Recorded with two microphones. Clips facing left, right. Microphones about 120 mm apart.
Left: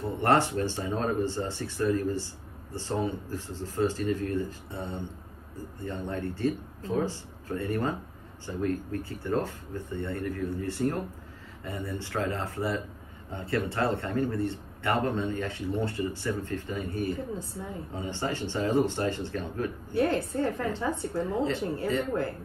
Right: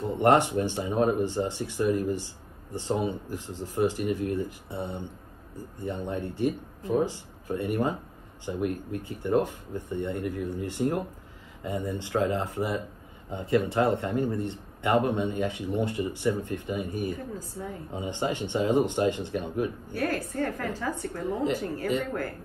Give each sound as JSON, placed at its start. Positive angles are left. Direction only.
{"t": 0.0, "sound": "a man's voice", "side_deg": -15}
{"t": 19.9, "sound": "a woman's voice", "side_deg": 25}